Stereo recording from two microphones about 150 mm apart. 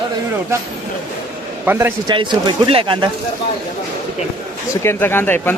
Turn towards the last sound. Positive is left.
turn(degrees=15)  # may be behind; listen again after turning